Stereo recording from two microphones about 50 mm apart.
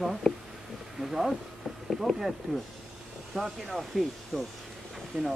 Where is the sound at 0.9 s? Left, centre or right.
Centre.